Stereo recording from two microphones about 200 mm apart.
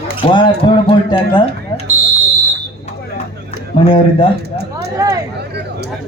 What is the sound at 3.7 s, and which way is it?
Speech, 25° left (ahead or behind).